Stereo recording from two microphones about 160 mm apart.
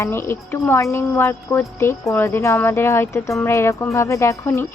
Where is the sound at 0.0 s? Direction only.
15° left (ahead or behind).